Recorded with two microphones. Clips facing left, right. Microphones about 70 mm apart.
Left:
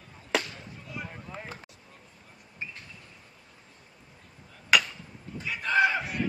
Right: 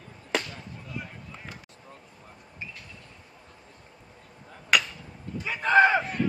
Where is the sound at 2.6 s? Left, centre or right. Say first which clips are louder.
Left 1 dB; left.